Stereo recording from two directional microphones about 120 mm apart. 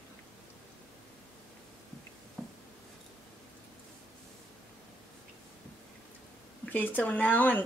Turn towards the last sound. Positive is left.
turn(degrees=15)  # may be behind; listen again after turning